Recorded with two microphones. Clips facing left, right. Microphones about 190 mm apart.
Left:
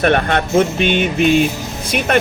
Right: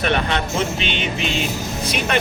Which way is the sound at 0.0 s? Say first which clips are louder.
Left 6 dB; 50° left (ahead or behind).